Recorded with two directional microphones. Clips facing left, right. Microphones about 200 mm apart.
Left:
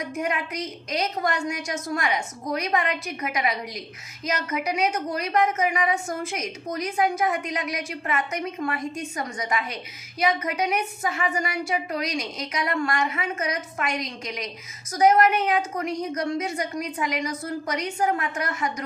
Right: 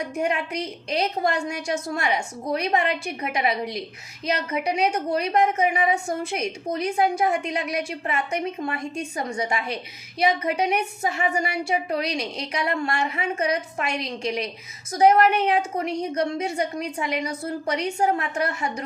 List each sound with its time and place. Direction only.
0.0 s a woman's voice: 30° right (ahead or behind)